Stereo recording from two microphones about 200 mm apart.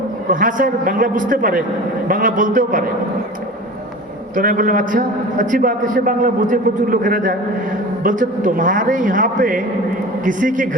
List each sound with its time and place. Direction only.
0.3 s a man's voice: 40° right (ahead or behind)
4.4 s a man's voice: 45° right (ahead or behind)